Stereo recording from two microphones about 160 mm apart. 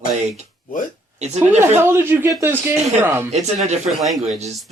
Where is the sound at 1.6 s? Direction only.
15° right (ahead or behind).